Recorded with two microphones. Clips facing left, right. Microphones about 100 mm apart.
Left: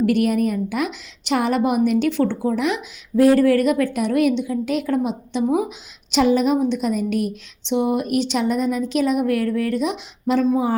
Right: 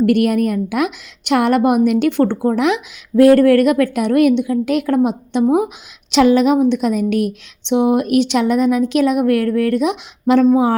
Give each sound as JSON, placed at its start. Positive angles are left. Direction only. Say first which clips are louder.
{"t": 0.0, "sound": "a woman's voice", "louder": "right 4 dB", "side_deg": -65}